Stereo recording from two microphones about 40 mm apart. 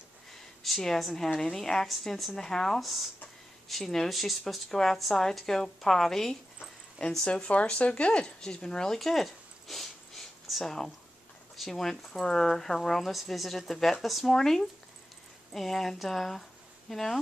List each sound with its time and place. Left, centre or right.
0.7 s speech: centre
1.9 s speech: centre
2.3 s speech: centre
2.8 s speech: centre
4.6 s speech: centre
4.9 s speech: centre; by 8.3 s left
8.4 s sniff: centre
11.5 s speech: centre